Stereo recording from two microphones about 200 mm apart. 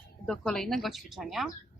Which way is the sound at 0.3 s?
Centre (ahead or behind).